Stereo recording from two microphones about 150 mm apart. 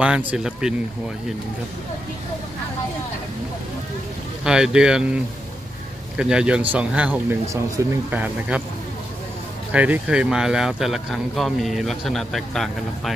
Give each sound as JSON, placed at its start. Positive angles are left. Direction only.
{"t": 0.0, "sound": "speech", "side_deg": -10}
{"t": 4.5, "sound": "speech", "side_deg": -5}
{"t": 8.1, "sound": "speech", "side_deg": -10}
{"t": 9.7, "sound": "speech", "side_deg": -10}